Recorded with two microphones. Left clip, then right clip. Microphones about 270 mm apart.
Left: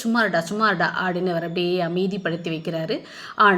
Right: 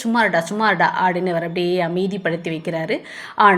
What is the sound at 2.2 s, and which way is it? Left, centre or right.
Speech, right.